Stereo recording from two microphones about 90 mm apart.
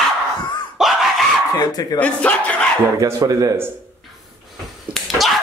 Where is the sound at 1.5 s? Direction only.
45° left (ahead or behind).